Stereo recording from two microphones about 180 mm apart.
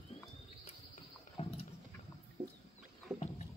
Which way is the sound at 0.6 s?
35° left (ahead or behind).